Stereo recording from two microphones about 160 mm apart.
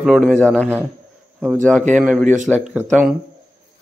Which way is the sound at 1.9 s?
5° right (ahead or behind).